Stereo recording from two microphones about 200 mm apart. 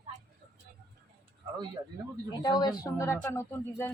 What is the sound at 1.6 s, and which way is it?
Speech, 20° right (ahead or behind).